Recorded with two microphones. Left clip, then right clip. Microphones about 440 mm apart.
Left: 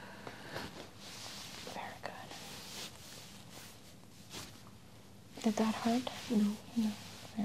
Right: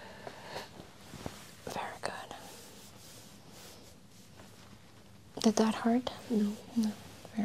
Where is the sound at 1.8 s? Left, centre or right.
Right.